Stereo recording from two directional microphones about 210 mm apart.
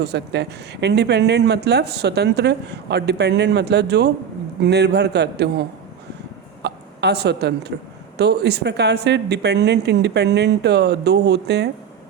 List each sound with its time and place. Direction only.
0.0 s speech: 55° right (ahead or behind)
6.6 s hiccup: 55° right (ahead or behind)
7.7 s speech: 50° right (ahead or behind)